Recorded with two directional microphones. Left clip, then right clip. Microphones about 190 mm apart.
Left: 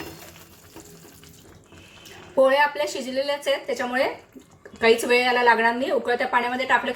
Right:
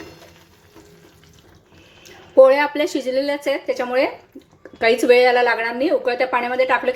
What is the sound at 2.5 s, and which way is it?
A woman's voice, 45° right (ahead or behind).